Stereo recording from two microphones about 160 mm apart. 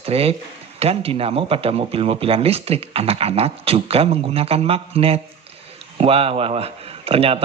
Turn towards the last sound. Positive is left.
turn(degrees=-40)  # may be behind; listen again after turning